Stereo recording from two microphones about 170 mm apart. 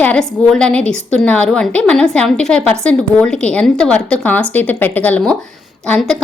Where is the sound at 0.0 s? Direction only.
5° left (ahead or behind).